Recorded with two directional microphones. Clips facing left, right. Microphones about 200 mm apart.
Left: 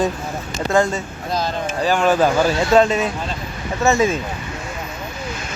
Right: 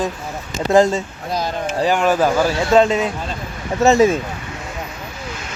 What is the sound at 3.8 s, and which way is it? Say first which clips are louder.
Speech: right 4 dB; 35° right (ahead or behind).